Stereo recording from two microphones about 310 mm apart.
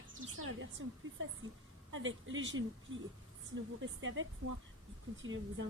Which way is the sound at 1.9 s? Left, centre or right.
Right.